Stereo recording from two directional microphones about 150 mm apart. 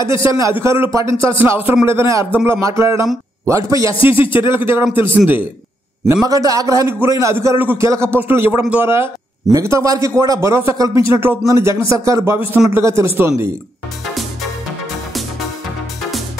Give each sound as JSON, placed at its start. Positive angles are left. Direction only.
{"t": 0.6, "sound": "a man's voice", "side_deg": -15}
{"t": 3.9, "sound": "speech", "side_deg": 35}
{"t": 4.3, "sound": "a man's voice", "side_deg": -15}
{"t": 6.2, "sound": "a man's voice", "side_deg": -25}